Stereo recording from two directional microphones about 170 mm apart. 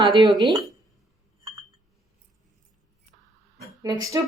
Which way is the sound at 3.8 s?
20° right (ahead or behind).